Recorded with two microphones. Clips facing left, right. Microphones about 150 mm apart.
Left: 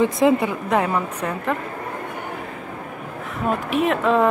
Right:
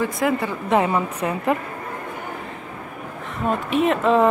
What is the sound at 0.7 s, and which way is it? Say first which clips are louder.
Speech: right 3 dB; 5° right (ahead or behind).